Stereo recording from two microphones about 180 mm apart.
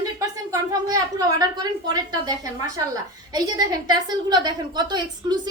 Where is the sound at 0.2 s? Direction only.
20° right (ahead or behind).